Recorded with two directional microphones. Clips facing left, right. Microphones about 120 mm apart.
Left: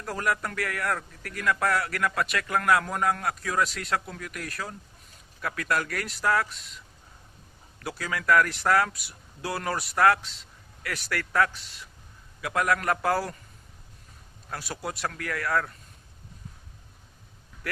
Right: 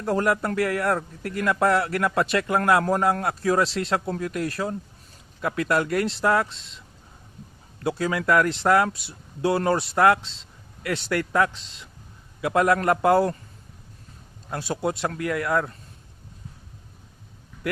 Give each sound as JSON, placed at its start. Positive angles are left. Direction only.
{"t": 0.0, "sound": "a man's voice", "side_deg": -25}
{"t": 14.5, "sound": "a man's voice", "side_deg": -25}